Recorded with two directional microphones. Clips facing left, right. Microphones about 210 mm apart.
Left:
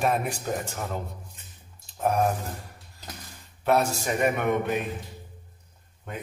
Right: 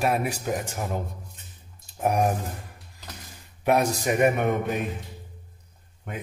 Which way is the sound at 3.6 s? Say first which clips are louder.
Right 1 dB; 15° right (ahead or behind).